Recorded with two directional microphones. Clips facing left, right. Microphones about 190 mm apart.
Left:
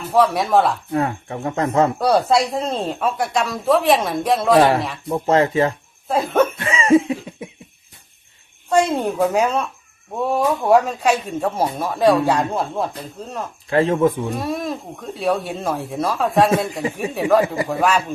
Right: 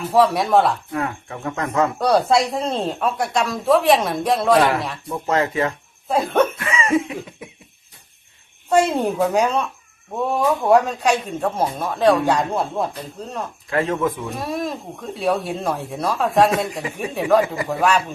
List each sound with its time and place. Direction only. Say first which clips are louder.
0.1 s a man's voice: even; centre (ahead or behind)
0.9 s speech: left 4 dB; 30° left (ahead or behind)
2.0 s a man's voice: even; centre (ahead or behind)
5.0 s speech: left 5 dB; 30° left (ahead or behind)
6.1 s a man's voice: left 1 dB; centre (ahead or behind)
6.6 s cough: left 5 dB; 30° left (ahead or behind)
8.7 s a man's voice: even; centre (ahead or behind)
13.7 s speech: left 5 dB; 30° left (ahead or behind)
14.3 s a man's voice: left 2 dB; centre (ahead or behind)
17.4 s speech: left 3 dB; 25° left (ahead or behind)
17.7 s a man's voice: even; centre (ahead or behind)